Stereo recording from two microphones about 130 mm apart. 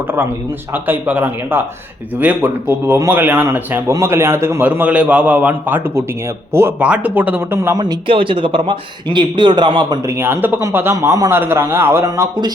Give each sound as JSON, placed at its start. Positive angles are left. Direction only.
{"t": 0.7, "sound": "a man's voice", "side_deg": -15}
{"t": 8.0, "sound": "a man's voice", "side_deg": -45}
{"t": 10.1, "sound": "a man's voice", "side_deg": -20}